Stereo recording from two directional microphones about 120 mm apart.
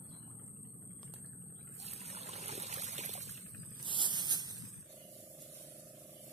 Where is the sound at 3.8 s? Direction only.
40° right (ahead or behind).